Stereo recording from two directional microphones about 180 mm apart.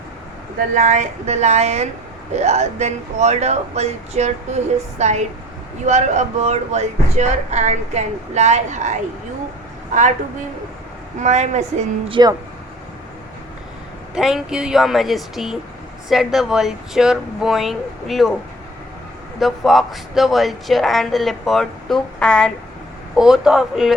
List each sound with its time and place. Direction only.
0.7 s speech: 40° right (ahead or behind)
11.2 s speech: 40° right (ahead or behind)
12.0 s speech: 30° right (ahead or behind)
14.2 s speech: 5° right (ahead or behind)
19.4 s speech: centre (ahead or behind)